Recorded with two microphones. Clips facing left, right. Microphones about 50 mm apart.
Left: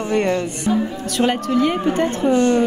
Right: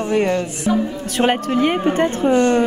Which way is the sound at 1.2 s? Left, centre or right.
Right.